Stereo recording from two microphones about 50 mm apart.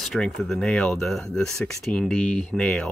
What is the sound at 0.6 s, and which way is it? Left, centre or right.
Speech, centre.